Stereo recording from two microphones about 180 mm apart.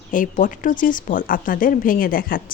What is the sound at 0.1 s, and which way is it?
A woman's voice, 45° left (ahead or behind).